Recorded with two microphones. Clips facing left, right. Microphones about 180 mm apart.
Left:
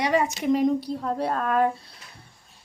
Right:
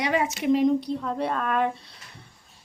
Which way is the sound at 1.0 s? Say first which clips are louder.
Left 1 dB; 35° left (ahead or behind).